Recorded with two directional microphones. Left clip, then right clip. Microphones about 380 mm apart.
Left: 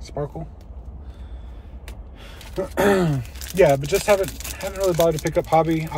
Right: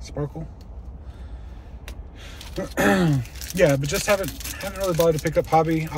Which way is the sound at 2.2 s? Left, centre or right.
Centre.